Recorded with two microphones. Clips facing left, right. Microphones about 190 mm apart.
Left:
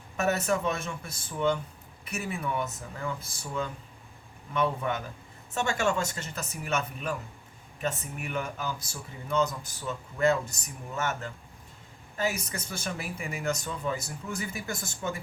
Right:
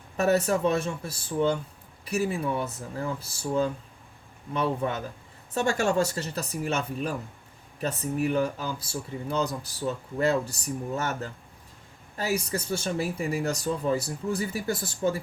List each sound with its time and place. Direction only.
0.2 s speech: 35° right (ahead or behind)